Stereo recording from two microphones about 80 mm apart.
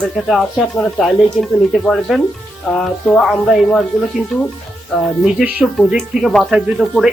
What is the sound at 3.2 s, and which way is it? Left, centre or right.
Speech, centre.